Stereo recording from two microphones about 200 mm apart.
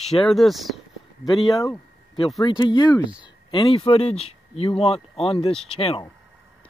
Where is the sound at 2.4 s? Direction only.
25° left (ahead or behind).